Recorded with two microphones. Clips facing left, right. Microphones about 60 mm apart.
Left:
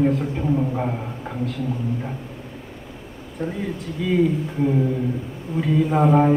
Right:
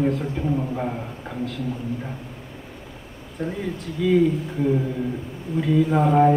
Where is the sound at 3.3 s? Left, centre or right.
Centre.